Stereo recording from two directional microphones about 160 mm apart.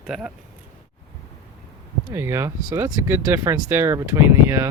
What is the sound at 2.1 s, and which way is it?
Speech, 15° right (ahead or behind).